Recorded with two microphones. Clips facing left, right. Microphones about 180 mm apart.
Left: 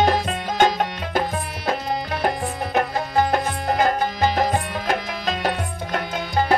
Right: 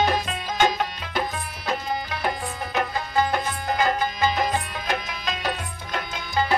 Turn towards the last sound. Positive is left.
turn(degrees=50)  # may be behind; listen again after turning